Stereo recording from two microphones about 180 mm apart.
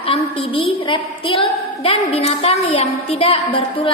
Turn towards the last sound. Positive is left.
turn(degrees=30)  # may be behind; listen again after turning